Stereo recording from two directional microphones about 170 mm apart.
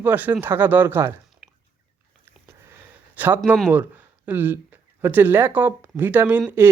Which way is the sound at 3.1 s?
10° right (ahead or behind).